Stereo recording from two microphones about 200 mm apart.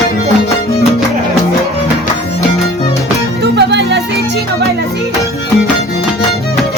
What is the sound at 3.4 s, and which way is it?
Music, 60° right (ahead or behind).